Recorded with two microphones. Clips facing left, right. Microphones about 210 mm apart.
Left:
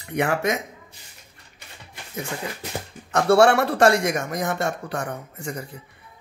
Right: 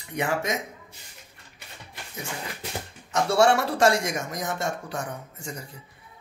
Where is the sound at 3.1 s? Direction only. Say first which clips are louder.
Left 4 dB; 60° left (ahead or behind).